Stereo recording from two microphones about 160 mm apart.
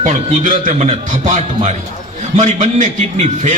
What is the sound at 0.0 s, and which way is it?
A man's voice, 55° right (ahead or behind).